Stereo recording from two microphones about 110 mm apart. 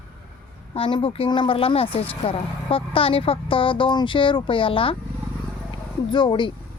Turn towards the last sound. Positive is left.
turn(degrees=45)  # may be behind; listen again after turning